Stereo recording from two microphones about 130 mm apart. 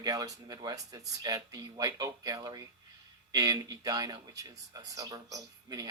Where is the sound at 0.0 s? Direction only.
25° right (ahead or behind).